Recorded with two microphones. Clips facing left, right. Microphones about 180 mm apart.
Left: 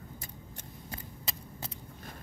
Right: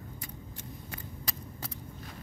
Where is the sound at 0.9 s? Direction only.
25° left (ahead or behind).